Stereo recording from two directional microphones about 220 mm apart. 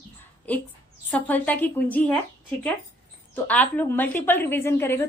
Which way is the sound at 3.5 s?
5° left (ahead or behind).